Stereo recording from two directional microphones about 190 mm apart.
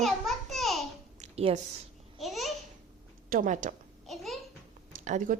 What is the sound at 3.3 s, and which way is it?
Speech, 45° right (ahead or behind).